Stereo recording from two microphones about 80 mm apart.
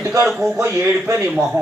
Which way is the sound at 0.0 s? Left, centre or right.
Right.